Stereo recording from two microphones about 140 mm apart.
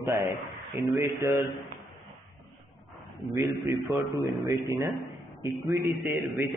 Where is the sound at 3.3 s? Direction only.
25° right (ahead or behind).